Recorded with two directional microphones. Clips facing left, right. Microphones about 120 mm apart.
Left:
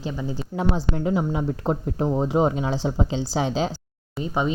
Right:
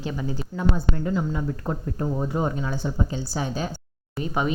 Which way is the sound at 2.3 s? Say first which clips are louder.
Left 5 dB; 90° left.